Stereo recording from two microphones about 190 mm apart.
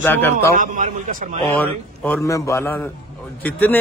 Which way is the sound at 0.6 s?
45° right (ahead or behind).